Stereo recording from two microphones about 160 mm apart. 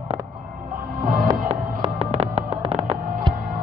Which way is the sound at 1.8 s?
40° right (ahead or behind).